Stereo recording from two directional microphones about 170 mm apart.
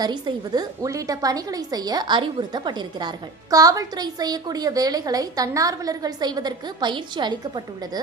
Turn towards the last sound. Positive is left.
turn(degrees=-25)  # may be behind; listen again after turning